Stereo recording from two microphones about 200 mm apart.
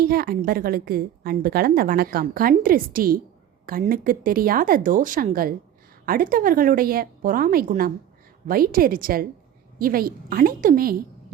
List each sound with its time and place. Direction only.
0.0 s a woman's voice: 50° right (ahead or behind)